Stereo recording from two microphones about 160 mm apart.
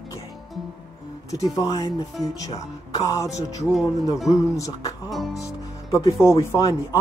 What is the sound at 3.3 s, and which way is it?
Speech, 20° left (ahead or behind).